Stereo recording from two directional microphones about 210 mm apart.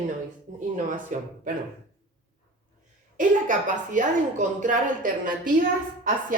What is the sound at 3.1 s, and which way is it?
A woman's voice, 35° right (ahead or behind).